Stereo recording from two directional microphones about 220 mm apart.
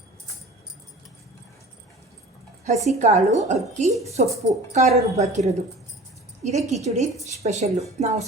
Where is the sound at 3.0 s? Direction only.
30° right (ahead or behind).